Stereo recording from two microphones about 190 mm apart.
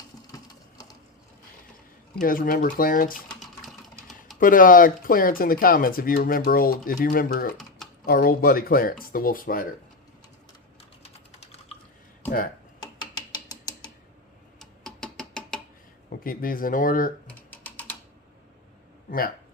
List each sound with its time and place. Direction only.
2.2 s speech: 50° left (ahead or behind)
3.2 s a sound: centre (ahead or behind)
4.4 s speech: 45° left (ahead or behind)
7.5 s typing: centre (ahead or behind)
8.0 s speech: 50° left (ahead or behind)
11.0 s typing: 35° left (ahead or behind)
13.0 s a sound: 20° left (ahead or behind)
14.6 s tick-tock: 5° left (ahead or behind)
16.2 s speech: 50° left (ahead or behind)
17.2 s typing: 10° left (ahead or behind)